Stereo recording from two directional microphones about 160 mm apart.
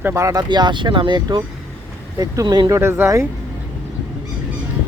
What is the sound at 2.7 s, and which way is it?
Speech, 15° right (ahead or behind).